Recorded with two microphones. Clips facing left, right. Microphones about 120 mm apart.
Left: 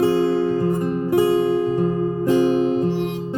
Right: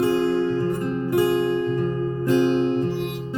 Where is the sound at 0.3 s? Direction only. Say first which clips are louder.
Left 2 dB; 10° left (ahead or behind).